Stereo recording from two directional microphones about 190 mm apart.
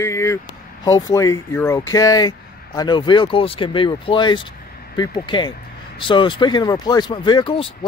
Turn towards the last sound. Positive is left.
turn(degrees=25)  # may be behind; listen again after turning